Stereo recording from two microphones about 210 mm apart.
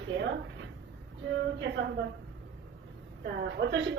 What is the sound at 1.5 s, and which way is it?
Speech, 60° right (ahead or behind).